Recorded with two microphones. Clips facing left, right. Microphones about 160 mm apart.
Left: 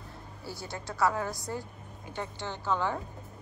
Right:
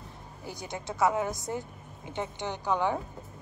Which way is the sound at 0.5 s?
20° right (ahead or behind).